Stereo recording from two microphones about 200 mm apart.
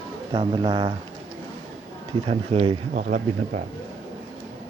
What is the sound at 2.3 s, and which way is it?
Speech, 25° right (ahead or behind).